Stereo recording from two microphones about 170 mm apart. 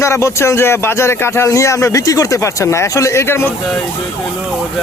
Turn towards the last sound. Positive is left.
turn(degrees=15)  # may be behind; listen again after turning